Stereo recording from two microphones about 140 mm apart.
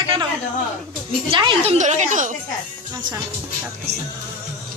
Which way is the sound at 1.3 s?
40° right (ahead or behind).